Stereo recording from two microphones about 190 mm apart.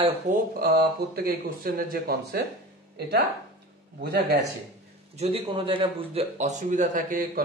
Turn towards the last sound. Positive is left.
turn(degrees=-40)  # may be behind; listen again after turning